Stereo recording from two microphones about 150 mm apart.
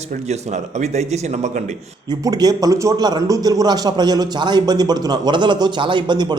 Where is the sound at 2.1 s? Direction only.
25° right (ahead or behind).